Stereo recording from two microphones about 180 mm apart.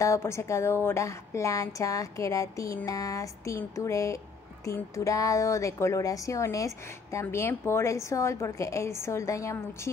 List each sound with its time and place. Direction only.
0.0 s a woman's voice: 15° left (ahead or behind)